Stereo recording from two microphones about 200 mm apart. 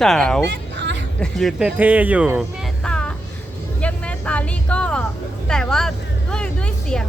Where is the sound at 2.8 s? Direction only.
5° left (ahead or behind).